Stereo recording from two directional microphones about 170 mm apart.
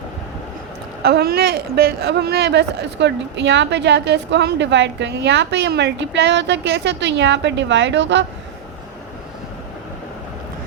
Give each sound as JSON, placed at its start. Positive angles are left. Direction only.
{"t": 1.0, "sound": "speech", "side_deg": -65}